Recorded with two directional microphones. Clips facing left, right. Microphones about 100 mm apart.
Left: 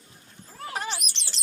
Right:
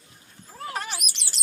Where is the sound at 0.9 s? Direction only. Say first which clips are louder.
Even; 10° right (ahead or behind).